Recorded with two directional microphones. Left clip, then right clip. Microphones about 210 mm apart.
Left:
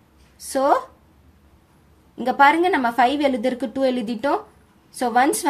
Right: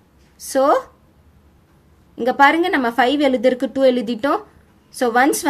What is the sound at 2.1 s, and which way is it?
A woman's voice, 15° right (ahead or behind).